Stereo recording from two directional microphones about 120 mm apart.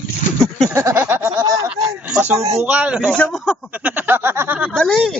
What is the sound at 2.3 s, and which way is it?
Speech, 65° right (ahead or behind).